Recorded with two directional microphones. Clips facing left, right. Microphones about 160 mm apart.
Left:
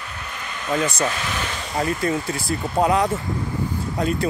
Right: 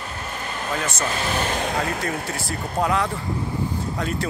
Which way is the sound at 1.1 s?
35° right (ahead or behind).